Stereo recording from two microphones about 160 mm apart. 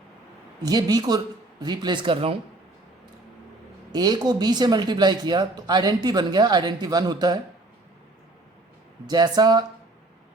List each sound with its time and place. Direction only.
0.6 s speech: 25° right (ahead or behind)
3.9 s speech: 25° right (ahead or behind)
9.0 s speech: 25° right (ahead or behind)